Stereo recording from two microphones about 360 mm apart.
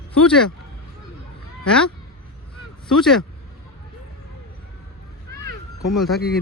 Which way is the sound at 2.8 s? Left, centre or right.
Centre.